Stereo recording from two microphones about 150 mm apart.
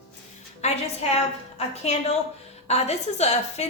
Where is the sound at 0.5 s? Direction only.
45° left (ahead or behind).